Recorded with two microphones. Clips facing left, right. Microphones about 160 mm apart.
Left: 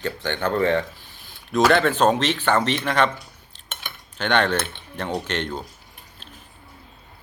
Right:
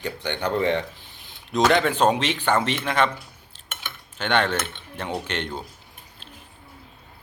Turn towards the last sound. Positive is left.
turn(degrees=-10)  # may be behind; listen again after turning